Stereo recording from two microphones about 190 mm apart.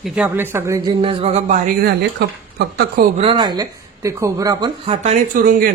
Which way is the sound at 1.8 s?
55° right (ahead or behind).